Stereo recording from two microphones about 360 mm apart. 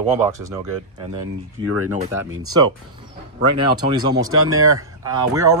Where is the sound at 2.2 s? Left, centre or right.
Right.